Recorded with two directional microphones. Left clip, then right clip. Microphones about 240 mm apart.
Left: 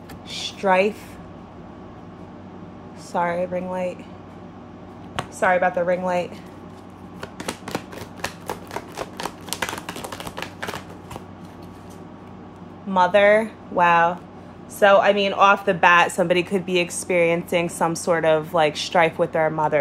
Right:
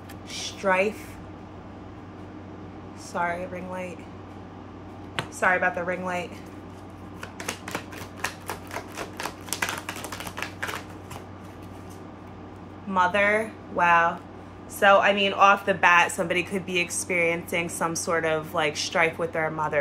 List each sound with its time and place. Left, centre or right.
0.6 s a woman's voice: left
3.1 s a woman's voice: left
5.4 s a woman's voice: left
7.2 s a sound: left
8.2 s typewriter: left
12.9 s a woman's voice: left